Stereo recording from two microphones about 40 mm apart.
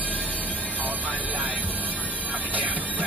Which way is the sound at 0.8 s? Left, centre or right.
Right.